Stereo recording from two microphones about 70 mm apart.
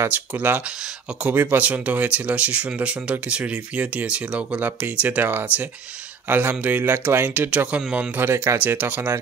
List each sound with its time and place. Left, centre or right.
0.1 s speech: right
6.8 s speech: right
7.2 s speech: centre